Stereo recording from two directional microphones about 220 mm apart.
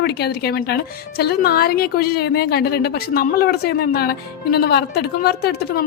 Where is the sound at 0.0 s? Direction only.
50° left (ahead or behind).